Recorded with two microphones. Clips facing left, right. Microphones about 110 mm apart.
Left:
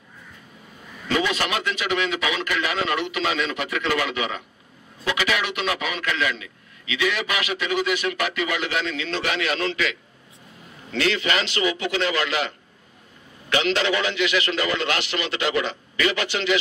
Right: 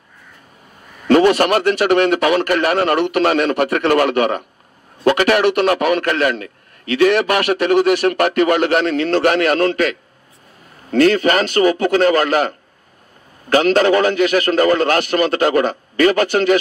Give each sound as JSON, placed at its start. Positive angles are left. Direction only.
{"t": 1.0, "sound": "a man's voice", "side_deg": -55}